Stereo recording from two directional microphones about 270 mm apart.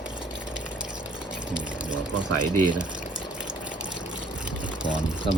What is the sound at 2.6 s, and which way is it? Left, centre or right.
Speech, centre.